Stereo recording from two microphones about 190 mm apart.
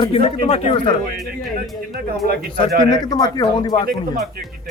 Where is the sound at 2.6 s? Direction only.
20° left (ahead or behind).